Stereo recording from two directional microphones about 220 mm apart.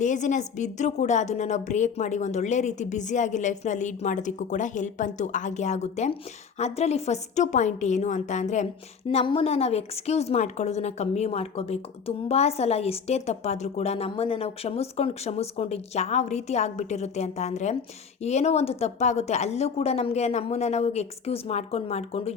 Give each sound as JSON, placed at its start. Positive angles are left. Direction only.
{"t": 0.0, "sound": "a woman's voice", "side_deg": 35}